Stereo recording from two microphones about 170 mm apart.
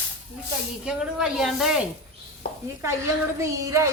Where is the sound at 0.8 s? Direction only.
5° right (ahead or behind).